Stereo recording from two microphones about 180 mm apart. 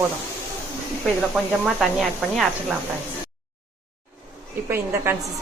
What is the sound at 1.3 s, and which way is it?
Speech, centre (ahead or behind).